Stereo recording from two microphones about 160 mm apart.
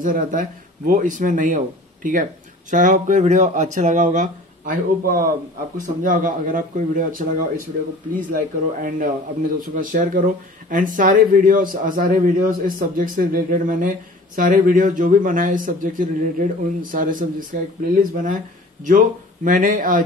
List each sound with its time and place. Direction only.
0.0 s speech: 55° right (ahead or behind)
2.7 s speech: 55° right (ahead or behind)
18.9 s speech: 55° right (ahead or behind)